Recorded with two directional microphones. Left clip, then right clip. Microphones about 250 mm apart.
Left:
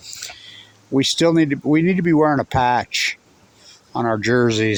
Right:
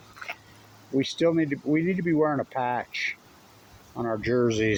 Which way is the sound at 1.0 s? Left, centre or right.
Left.